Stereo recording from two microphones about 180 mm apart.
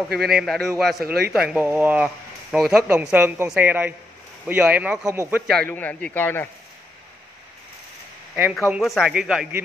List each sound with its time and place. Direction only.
0.2 s speech: centre (ahead or behind)
1.0 s speech: 60° right (ahead or behind)
1.3 s a woman's voice: 5° right (ahead or behind)
5.5 s a man's voice: 5° left (ahead or behind)
8.6 s speech: 5° right (ahead or behind)